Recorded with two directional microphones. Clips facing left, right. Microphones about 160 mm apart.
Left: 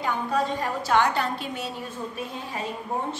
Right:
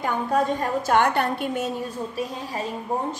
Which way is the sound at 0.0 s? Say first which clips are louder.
Right 3 dB; 45° right (ahead or behind).